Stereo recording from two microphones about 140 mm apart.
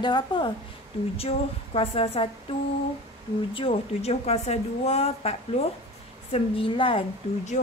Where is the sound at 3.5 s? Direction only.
45° left (ahead or behind).